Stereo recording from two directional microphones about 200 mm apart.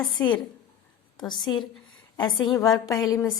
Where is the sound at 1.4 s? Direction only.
Centre (ahead or behind).